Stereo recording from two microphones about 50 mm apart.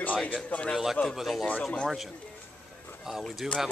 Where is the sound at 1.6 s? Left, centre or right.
Centre.